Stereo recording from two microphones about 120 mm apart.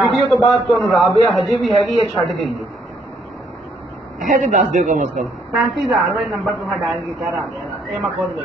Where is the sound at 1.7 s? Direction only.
55° right (ahead or behind).